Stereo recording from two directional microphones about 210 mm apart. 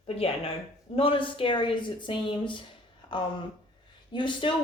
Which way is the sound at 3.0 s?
20° left (ahead or behind).